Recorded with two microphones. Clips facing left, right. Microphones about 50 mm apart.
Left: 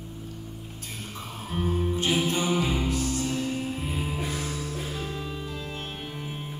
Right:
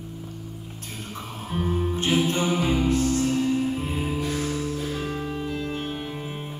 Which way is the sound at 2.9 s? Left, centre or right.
Right.